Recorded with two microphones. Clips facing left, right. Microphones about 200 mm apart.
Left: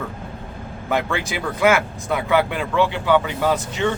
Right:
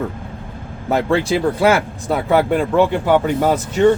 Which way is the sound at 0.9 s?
35° right (ahead or behind).